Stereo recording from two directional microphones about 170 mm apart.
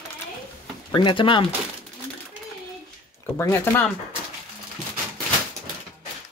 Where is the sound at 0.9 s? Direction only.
30° left (ahead or behind).